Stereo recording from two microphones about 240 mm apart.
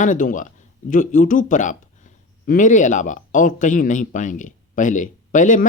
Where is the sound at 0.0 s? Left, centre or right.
Left.